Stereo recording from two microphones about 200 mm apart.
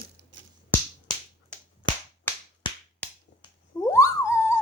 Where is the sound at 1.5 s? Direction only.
5° left (ahead or behind).